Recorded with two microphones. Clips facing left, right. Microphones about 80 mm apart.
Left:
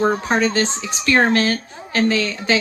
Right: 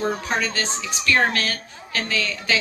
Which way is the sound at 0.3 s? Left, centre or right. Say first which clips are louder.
Left 6 dB; left.